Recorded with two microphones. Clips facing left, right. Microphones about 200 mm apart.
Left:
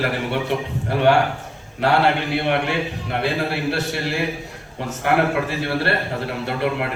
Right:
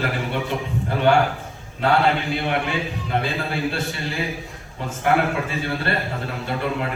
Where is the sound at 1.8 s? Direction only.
65° left (ahead or behind).